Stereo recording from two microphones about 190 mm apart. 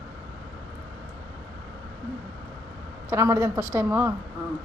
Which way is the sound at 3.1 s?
15° right (ahead or behind).